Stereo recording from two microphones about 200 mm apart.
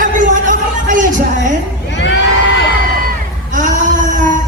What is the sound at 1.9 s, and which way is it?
Crowd, 60° left (ahead or behind).